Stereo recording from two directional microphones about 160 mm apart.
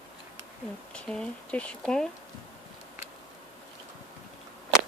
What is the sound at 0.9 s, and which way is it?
Speech, 5° left (ahead or behind).